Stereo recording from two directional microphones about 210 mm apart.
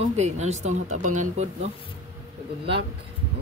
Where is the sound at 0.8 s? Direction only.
90° right.